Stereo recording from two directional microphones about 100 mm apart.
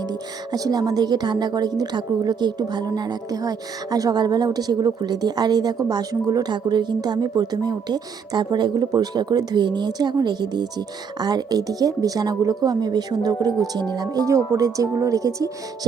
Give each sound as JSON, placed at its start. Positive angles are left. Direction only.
{"t": 0.1, "sound": "speech", "side_deg": -40}